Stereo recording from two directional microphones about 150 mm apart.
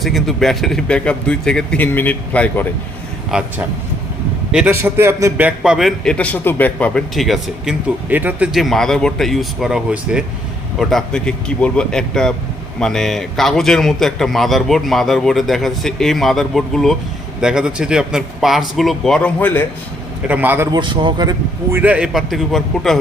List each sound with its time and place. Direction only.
0.0 s a man's voice: centre (ahead or behind)
3.3 s a man's voice: 5° right (ahead or behind)
4.5 s a man's voice: 15° right (ahead or behind); by 19.6 s 10° left (ahead or behind)
20.2 s a man's voice: 10° right (ahead or behind)
20.7 s speech: 30° right (ahead or behind)
21.7 s a man's voice: 10° right (ahead or behind)